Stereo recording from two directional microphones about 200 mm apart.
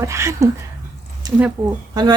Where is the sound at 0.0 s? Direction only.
15° right (ahead or behind).